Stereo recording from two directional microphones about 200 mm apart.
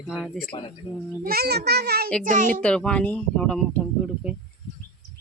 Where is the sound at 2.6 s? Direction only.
5° left (ahead or behind).